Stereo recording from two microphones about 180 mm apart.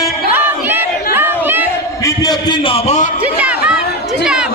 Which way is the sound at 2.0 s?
20° left (ahead or behind).